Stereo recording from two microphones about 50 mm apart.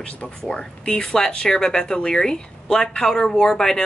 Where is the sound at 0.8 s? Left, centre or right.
Centre.